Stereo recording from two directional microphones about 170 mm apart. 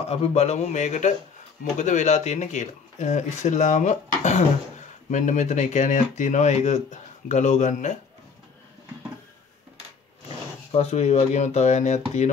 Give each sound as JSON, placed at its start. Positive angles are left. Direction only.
{"t": 0.0, "sound": "speech", "side_deg": 35}
{"t": 10.2, "sound": "speech", "side_deg": 35}